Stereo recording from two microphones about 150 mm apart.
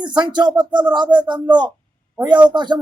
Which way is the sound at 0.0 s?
30° right (ahead or behind).